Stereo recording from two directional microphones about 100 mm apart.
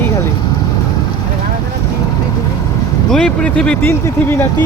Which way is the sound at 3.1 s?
10° left (ahead or behind).